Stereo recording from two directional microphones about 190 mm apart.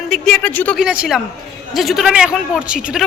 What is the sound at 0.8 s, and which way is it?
A woman's voice, 5° right (ahead or behind).